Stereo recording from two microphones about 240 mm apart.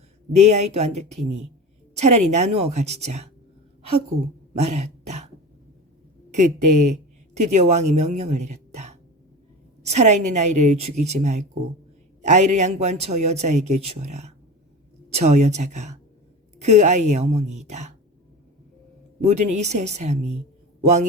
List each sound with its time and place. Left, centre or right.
0.3 s a man's voice: right
4.5 s throat clearing: right
6.3 s a man's voice: right
19.2 s a man's voice: right